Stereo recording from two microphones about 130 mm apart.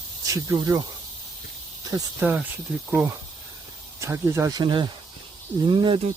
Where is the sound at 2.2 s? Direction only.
10° right (ahead or behind).